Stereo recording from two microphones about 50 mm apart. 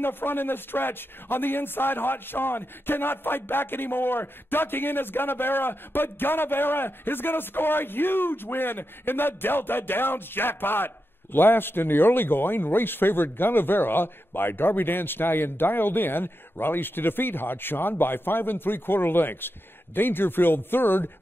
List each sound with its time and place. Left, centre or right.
0.0 s speech: left